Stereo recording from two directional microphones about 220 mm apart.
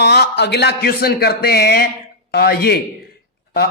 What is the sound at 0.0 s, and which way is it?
Speech, 50° left (ahead or behind).